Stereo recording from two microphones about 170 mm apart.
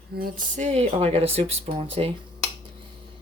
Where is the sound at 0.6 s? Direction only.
35° right (ahead or behind).